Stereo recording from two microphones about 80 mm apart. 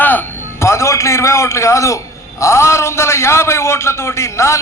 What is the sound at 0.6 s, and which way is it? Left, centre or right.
A man's voice, left.